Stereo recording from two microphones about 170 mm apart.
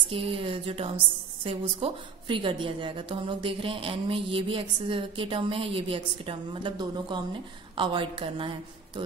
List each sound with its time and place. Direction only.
0.1 s a woman's voice: 35° right (ahead or behind)